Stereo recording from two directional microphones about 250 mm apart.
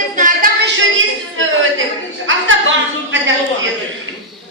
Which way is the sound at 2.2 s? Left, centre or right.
Right.